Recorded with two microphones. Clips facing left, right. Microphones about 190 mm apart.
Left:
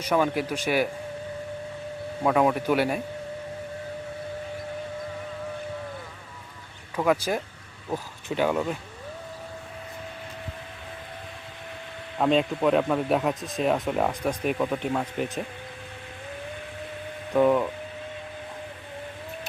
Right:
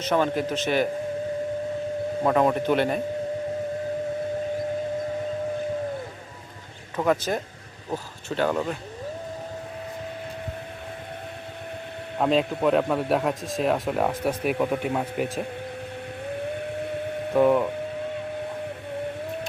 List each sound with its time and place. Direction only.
0.0 s a man's voice: 10° left (ahead or behind)
2.2 s a man's voice: 5° left (ahead or behind)
6.9 s a man's voice: 10° left (ahead or behind)
12.2 s a man's voice: centre (ahead or behind)
16.5 s a sound: 55° right (ahead or behind)
17.3 s a man's voice: 5° right (ahead or behind)